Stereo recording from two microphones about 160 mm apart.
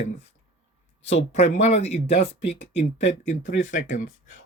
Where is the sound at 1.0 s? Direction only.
40° left (ahead or behind).